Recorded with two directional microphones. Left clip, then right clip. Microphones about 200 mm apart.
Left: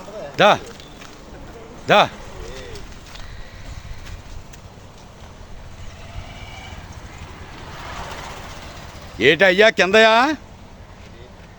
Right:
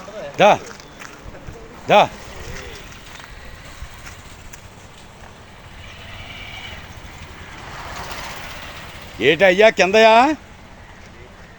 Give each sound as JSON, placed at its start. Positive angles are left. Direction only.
{"t": 0.3, "sound": "speech", "side_deg": 0}
{"t": 1.9, "sound": "speech", "side_deg": 0}
{"t": 7.9, "sound": "vehicle", "side_deg": -55}
{"t": 9.1, "sound": "speech", "side_deg": 5}